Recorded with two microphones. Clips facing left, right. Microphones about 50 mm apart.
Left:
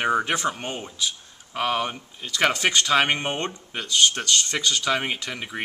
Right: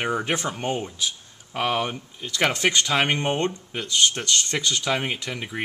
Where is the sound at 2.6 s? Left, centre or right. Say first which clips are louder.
Left 1 dB; centre.